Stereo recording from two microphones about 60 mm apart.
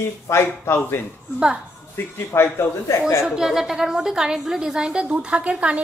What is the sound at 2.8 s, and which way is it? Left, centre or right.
Speech, left.